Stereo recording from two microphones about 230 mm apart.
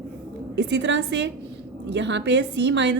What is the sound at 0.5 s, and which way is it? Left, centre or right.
A woman's voice, right.